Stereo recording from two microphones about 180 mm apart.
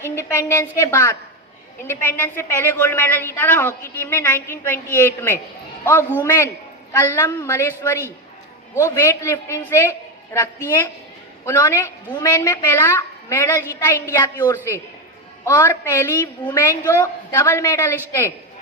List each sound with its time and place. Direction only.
0.0 s a woman's voice: 15° left (ahead or behind)